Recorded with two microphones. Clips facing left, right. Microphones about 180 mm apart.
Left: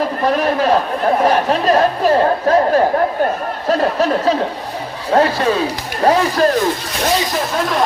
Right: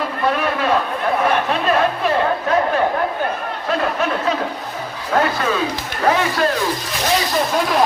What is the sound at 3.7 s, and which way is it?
Speech, 35° left (ahead or behind).